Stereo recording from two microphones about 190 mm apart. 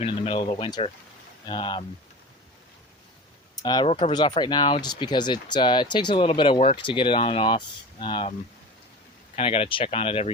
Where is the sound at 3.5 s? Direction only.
20° left (ahead or behind).